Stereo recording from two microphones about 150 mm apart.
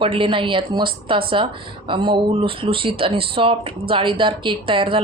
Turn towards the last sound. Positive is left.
turn(degrees=-35)  # may be behind; listen again after turning